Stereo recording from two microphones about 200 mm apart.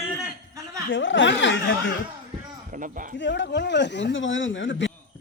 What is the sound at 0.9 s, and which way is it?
Speech, 70° left (ahead or behind).